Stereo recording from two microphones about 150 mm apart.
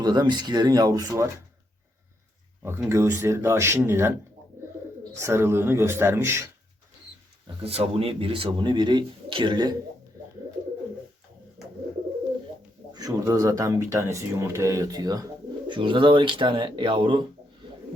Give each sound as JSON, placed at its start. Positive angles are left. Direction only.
{"t": 0.0, "sound": "speech", "side_deg": -25}
{"t": 2.6, "sound": "speech", "side_deg": -15}
{"t": 5.2, "sound": "speech", "side_deg": -15}
{"t": 7.6, "sound": "speech", "side_deg": -40}
{"t": 12.9, "sound": "speech", "side_deg": -25}